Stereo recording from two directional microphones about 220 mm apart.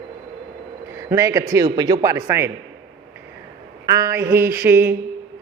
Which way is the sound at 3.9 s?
15° right (ahead or behind).